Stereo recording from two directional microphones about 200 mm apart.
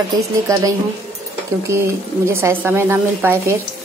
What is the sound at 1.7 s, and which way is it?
A woman's voice, 15° right (ahead or behind).